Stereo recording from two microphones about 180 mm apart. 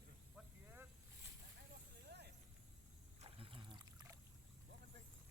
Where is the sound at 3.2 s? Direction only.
30° right (ahead or behind).